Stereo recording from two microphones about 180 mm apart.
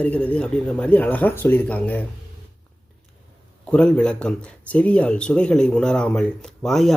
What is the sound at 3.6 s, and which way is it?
Speech, 5° left (ahead or behind).